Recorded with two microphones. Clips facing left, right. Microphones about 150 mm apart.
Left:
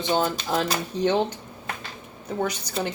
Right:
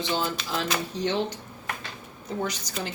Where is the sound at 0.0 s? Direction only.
45° left (ahead or behind).